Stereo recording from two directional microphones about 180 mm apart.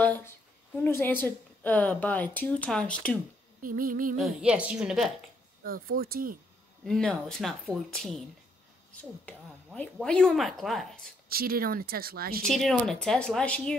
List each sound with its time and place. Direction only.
0.0 s a sound: 10° left (ahead or behind)
0.8 s a woman's voice: 10° left (ahead or behind)
3.6 s a sound: 50° right (ahead or behind)
4.2 s speech: 5° right (ahead or behind)
5.6 s speech: 55° right (ahead or behind)
6.8 s speech: centre (ahead or behind)
9.2 s speech: 5° left (ahead or behind)
11.2 s speech: 55° right (ahead or behind)
12.4 s speech: centre (ahead or behind)